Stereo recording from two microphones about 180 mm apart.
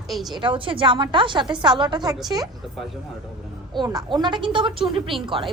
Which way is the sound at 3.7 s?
20° right (ahead or behind).